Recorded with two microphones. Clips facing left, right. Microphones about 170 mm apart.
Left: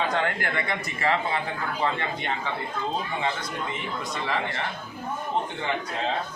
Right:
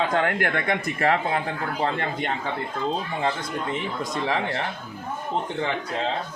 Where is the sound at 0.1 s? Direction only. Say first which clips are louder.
Right 4 dB; 55° right (ahead or behind).